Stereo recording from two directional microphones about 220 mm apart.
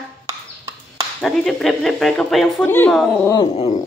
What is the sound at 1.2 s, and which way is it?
A woman's voice, centre (ahead or behind).